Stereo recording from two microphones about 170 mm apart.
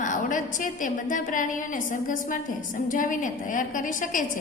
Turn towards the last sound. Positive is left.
turn(degrees=50)  # may be behind; listen again after turning